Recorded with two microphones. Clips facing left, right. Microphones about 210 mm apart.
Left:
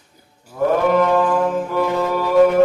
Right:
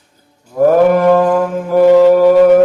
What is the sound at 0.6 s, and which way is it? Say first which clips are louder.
Music: right 7 dB; 50° right (ahead or behind).